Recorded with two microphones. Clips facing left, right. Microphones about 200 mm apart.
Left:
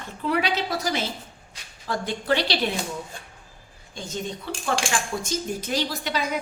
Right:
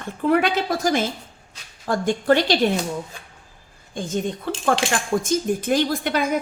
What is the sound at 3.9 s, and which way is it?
A woman's voice, 50° right (ahead or behind).